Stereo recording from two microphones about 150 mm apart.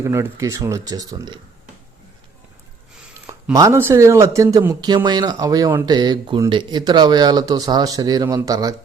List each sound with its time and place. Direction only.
0.0 s speech: 20° right (ahead or behind)
3.5 s speech: 20° right (ahead or behind)